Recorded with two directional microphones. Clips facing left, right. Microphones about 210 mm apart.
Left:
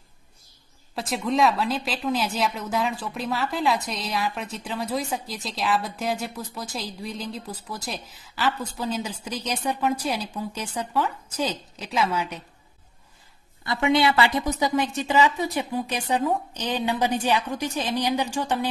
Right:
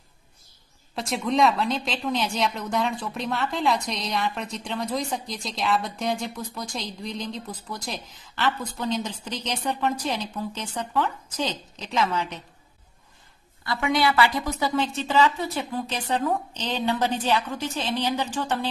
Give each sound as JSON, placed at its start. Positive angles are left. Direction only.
{"t": 0.9, "sound": "a woman's voice", "side_deg": 0}
{"t": 13.7, "sound": "a woman's voice", "side_deg": 25}